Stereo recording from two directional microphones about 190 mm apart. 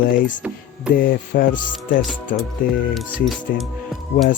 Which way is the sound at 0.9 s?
50° left (ahead or behind).